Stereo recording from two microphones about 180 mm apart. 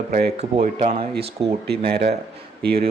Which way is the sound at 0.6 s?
35° right (ahead or behind).